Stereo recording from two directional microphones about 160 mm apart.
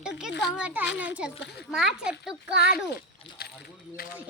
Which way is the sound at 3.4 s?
80° left.